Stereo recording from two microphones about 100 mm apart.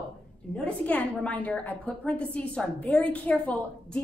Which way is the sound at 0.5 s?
10° left (ahead or behind).